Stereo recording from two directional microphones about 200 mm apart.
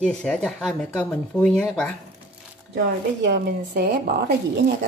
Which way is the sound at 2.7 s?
60° right (ahead or behind).